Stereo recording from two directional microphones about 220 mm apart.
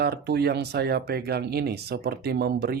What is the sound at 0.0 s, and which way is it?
Speech, 45° right (ahead or behind).